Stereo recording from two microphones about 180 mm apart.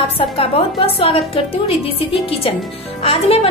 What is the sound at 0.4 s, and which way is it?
A woman's voice, 30° left (ahead or behind).